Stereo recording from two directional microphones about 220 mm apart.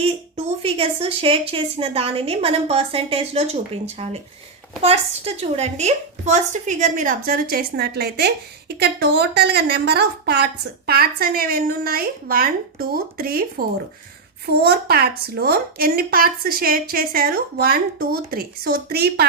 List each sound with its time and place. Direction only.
0.6 s a woman's voice: 25° right (ahead or behind); by 13.4 s 40° right (ahead or behind)
14.4 s a woman's voice: 45° right (ahead or behind)